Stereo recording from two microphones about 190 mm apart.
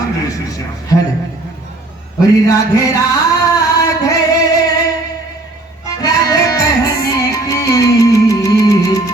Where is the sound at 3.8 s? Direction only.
20° left (ahead or behind).